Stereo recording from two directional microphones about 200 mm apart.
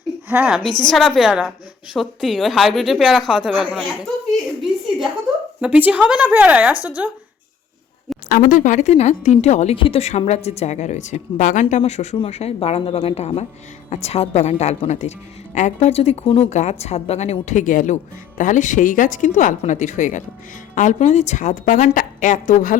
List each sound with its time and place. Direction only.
0.3 s a woman's voice: 5° right (ahead or behind)
5.5 s a woman's voice: 5° right (ahead or behind)
8.3 s speech: 40° left (ahead or behind)